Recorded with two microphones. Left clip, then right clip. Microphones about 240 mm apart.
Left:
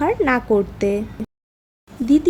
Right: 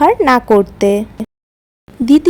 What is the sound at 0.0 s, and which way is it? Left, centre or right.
A woman's voice, right.